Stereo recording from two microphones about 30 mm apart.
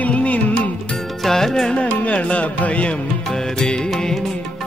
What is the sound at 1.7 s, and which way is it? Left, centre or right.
Music, left.